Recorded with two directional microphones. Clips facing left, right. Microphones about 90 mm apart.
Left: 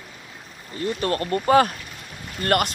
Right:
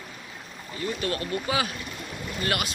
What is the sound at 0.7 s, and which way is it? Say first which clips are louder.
Speech: left 5 dB; 45° left (ahead or behind).